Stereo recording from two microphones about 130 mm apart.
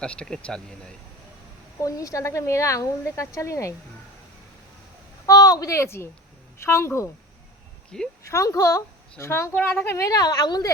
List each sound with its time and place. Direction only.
0.0 s speech: 5° left (ahead or behind)
1.8 s a woman's voice: 25° left (ahead or behind)
5.2 s a woman's voice: 25° left (ahead or behind)
7.9 s speech: 5° left (ahead or behind)
8.3 s a woman's voice: 25° left (ahead or behind)